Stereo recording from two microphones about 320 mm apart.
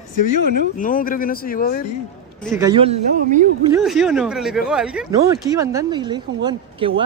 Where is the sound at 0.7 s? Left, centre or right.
Left.